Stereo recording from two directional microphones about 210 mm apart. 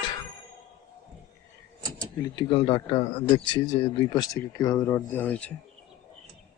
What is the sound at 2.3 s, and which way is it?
Speech, 25° left (ahead or behind).